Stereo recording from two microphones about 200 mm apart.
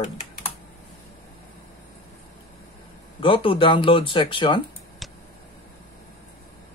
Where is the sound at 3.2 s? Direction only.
25° left (ahead or behind).